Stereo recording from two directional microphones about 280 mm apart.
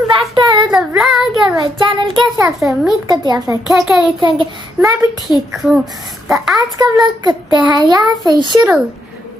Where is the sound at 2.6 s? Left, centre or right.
Centre.